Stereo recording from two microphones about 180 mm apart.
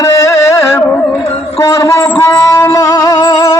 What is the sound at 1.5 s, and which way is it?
Speech, 15° left (ahead or behind).